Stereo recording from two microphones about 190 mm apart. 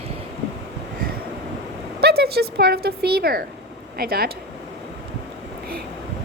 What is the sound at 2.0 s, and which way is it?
Speech, 55° right (ahead or behind).